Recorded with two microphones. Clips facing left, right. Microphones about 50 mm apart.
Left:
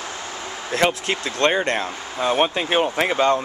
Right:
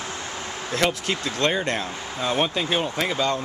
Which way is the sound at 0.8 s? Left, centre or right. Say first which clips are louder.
Left 3 dB; left.